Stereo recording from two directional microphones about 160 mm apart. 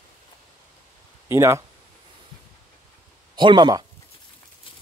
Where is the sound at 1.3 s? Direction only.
15° right (ahead or behind).